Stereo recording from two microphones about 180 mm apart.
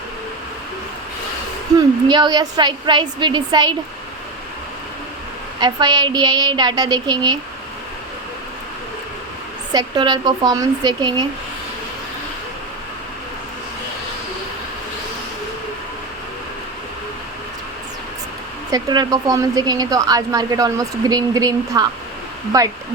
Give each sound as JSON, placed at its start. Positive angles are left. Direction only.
{"t": 2.0, "sound": "a woman's voice", "side_deg": -25}
{"t": 5.5, "sound": "a woman's voice", "side_deg": -25}
{"t": 9.7, "sound": "a woman's voice", "side_deg": -25}
{"t": 18.7, "sound": "a woman's voice", "side_deg": -20}